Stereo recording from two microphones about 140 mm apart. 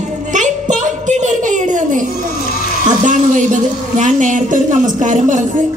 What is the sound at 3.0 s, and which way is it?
A woman's voice, 65° right (ahead or behind).